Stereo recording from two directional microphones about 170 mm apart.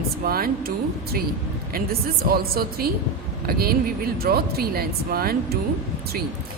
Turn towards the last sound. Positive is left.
turn(degrees=-60)  # may be behind; listen again after turning